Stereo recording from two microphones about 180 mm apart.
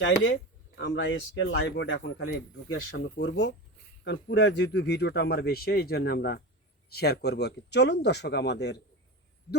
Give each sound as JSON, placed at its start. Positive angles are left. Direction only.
{"t": 0.0, "sound": "speech", "side_deg": 85}